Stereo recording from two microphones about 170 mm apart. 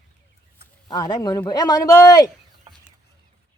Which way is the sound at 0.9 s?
25° left (ahead or behind).